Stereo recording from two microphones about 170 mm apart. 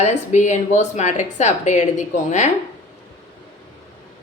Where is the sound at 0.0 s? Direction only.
45° left (ahead or behind).